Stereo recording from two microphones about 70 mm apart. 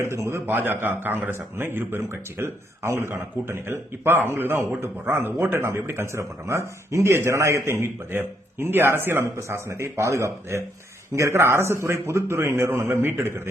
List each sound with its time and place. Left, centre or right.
0.0 s a man's voice: right